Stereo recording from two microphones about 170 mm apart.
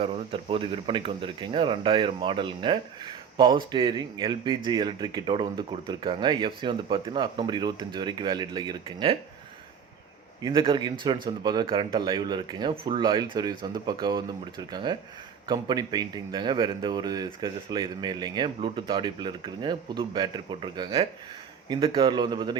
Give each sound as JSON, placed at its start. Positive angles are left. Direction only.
{"t": 0.0, "sound": "speech", "side_deg": -35}
{"t": 10.4, "sound": "speech", "side_deg": -30}